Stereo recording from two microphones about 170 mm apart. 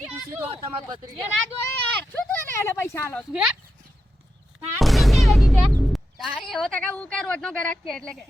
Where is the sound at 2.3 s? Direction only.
15° left (ahead or behind).